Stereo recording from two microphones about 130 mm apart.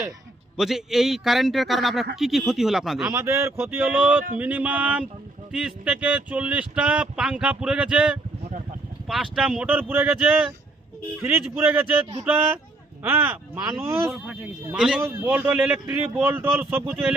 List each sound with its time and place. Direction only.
0.5 s a man's voice: 5° right (ahead or behind)
3.1 s speech: 20° right (ahead or behind)
13.0 s speech: 15° right (ahead or behind)
14.1 s a man's voice: 5° right (ahead or behind)